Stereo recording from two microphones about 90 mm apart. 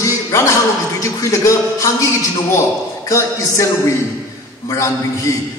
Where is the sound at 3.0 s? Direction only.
35° left (ahead or behind).